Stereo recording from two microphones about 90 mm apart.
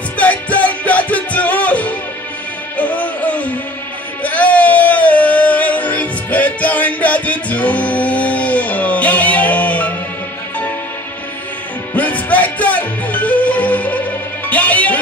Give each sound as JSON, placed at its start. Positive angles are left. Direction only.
{"t": 0.2, "sound": "music", "side_deg": 15}
{"t": 4.2, "sound": "a sound", "side_deg": 15}
{"t": 11.9, "sound": "music", "side_deg": 15}